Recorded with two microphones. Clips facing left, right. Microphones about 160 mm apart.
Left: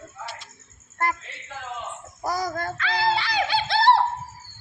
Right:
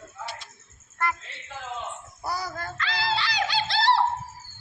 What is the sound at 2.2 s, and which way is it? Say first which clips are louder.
Wail: left 5 dB; 40° left (ahead or behind).